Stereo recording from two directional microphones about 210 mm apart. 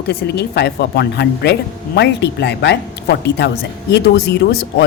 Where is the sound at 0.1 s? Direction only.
50° left (ahead or behind).